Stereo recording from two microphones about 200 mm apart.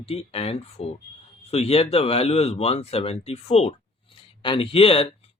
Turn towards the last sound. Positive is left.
turn(degrees=30)  # may be behind; listen again after turning